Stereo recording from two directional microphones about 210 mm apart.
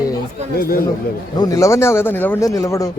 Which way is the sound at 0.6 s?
45° left (ahead or behind).